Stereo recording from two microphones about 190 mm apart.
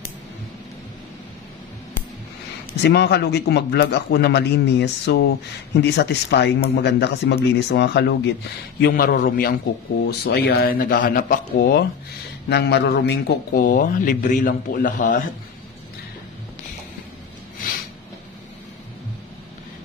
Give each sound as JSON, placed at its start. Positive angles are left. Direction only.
{"t": 2.8, "sound": "a man's voice", "side_deg": 60}
{"t": 8.8, "sound": "a man's voice", "side_deg": 50}